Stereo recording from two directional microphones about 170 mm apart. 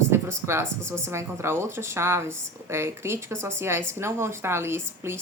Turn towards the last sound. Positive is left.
turn(degrees=-15)  # may be behind; listen again after turning